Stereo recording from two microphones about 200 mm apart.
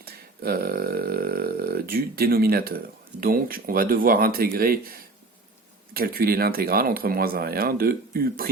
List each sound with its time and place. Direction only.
0.0 s speech: 50° right (ahead or behind)